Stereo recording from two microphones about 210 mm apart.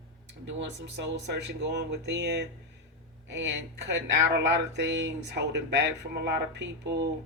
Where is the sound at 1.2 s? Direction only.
55° right (ahead or behind).